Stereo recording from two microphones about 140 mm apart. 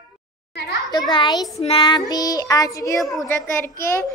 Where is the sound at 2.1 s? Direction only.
25° left (ahead or behind).